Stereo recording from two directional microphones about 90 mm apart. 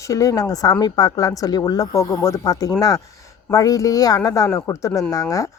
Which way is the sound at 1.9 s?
35° left (ahead or behind).